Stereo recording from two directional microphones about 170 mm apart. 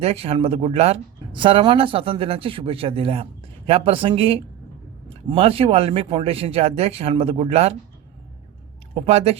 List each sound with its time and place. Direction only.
0.0 s speech: 35° right (ahead or behind)
9.0 s speech: 35° right (ahead or behind)